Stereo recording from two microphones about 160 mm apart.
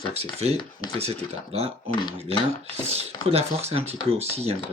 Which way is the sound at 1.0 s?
40° right (ahead or behind).